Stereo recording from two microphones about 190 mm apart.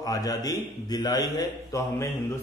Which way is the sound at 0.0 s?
20° left (ahead or behind).